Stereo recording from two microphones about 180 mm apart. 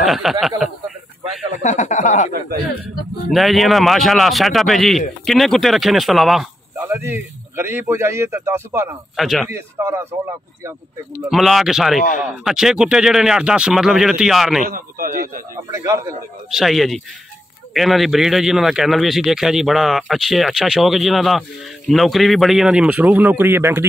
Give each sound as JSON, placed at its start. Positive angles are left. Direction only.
{"t": 0.0, "sound": "a sound", "side_deg": 0}
{"t": 1.6, "sound": "speech", "side_deg": 40}
{"t": 3.3, "sound": "speech", "side_deg": 0}
{"t": 6.9, "sound": "a man's voice", "side_deg": -10}
{"t": 9.1, "sound": "speech", "side_deg": 0}
{"t": 9.5, "sound": "a man's voice", "side_deg": -15}
{"t": 11.2, "sound": "speech", "side_deg": 0}
{"t": 14.7, "sound": "speech", "side_deg": -50}
{"t": 15.5, "sound": "a man's voice", "side_deg": -15}
{"t": 16.4, "sound": "speech", "side_deg": 0}